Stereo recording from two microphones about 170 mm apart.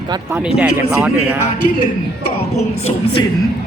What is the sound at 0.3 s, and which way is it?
Music, 10° right (ahead or behind).